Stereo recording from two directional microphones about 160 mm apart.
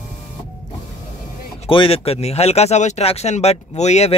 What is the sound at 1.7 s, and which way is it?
Speech, 35° left (ahead or behind).